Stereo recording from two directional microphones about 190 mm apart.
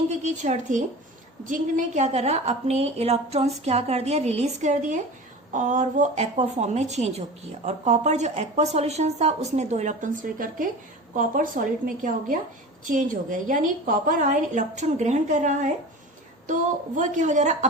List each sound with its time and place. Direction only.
0.2 s a woman's voice: 40° right (ahead or behind)